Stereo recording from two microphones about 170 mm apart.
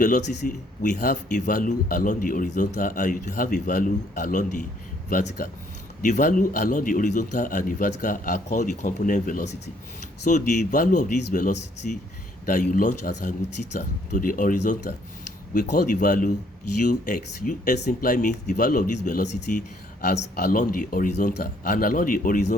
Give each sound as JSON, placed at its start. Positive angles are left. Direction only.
{"t": 0.0, "sound": "a man's voice", "side_deg": 50}
{"t": 6.0, "sound": "a man's voice", "side_deg": 50}